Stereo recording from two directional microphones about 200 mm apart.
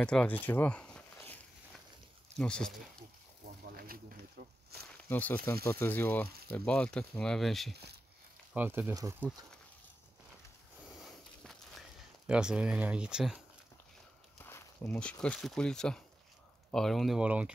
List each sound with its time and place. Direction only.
0.0 s a sound: 5° left (ahead or behind)
2.3 s speech: 5° left (ahead or behind)
3.6 s snake: 45° right (ahead or behind)
5.1 s speech: 10° left (ahead or behind)
8.5 s speech: 10° right (ahead or behind)
10.9 s walk: centre (ahead or behind)
12.3 s speech: 5° right (ahead or behind)
14.4 s speech: 10° left (ahead or behind); by 17.5 s 5° right (ahead or behind)